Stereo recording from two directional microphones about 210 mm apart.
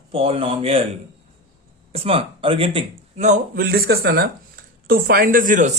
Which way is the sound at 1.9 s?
25° right (ahead or behind).